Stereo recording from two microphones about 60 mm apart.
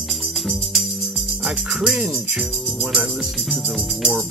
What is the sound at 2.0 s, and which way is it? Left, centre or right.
Jingle bell, centre.